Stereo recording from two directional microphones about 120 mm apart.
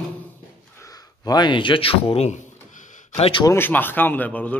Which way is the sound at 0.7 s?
30° left (ahead or behind).